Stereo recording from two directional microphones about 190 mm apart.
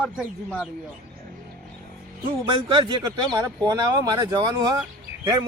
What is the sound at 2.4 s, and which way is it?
Speech, 25° right (ahead or behind).